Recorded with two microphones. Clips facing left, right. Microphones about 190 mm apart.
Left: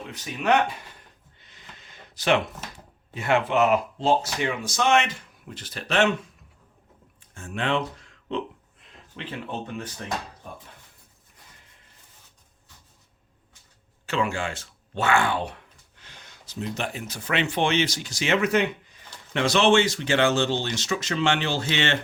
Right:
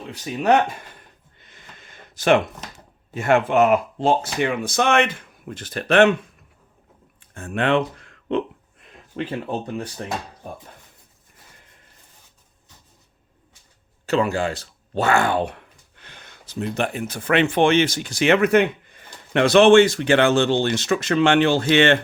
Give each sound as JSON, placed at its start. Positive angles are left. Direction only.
{"t": 0.1, "sound": "speech", "side_deg": -40}
{"t": 1.4, "sound": "a sound", "side_deg": -50}
{"t": 2.7, "sound": "speech", "side_deg": -45}
{"t": 7.3, "sound": "speech", "side_deg": -60}
{"t": 14.1, "sound": "speech", "side_deg": -40}
{"t": 16.0, "sound": "speech", "side_deg": -55}